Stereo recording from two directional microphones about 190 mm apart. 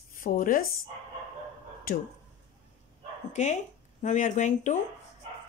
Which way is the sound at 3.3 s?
35° left (ahead or behind).